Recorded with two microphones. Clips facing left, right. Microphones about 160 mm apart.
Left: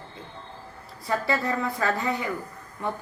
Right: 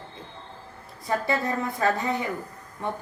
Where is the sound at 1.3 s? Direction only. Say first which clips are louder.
Left 2 dB; 25° right (ahead or behind).